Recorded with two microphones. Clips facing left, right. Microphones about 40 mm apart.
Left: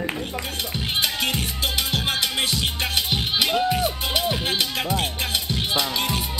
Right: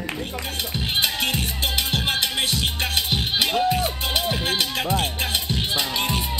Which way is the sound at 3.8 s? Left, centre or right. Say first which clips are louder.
Left 1 dB; right.